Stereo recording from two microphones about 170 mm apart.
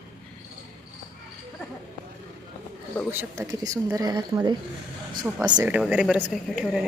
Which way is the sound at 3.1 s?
15° right (ahead or behind).